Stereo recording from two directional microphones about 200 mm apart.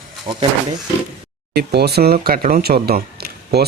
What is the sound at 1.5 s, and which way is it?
Speech, 55° right (ahead or behind).